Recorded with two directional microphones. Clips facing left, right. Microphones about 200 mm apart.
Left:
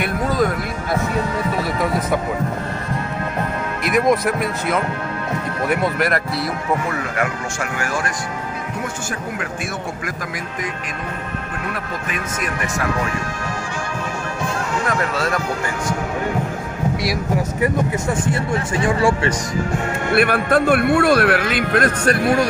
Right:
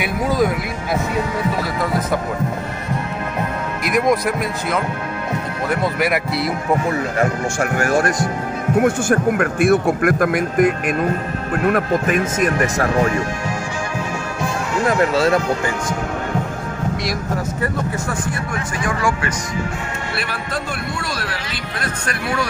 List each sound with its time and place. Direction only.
0.0 s speech: 5° right (ahead or behind)
3.9 s speech: 5° left (ahead or behind)
5.9 s speech: 10° right (ahead or behind)
7.7 s a man's voice: 50° right (ahead or behind)
14.9 s speech: 30° right (ahead or behind)
17.0 s speech: 10° left (ahead or behind); by 19.3 s 30° left (ahead or behind)
20.1 s speech: 55° left (ahead or behind)